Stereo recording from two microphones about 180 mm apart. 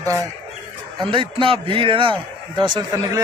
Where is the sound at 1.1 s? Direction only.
30° right (ahead or behind).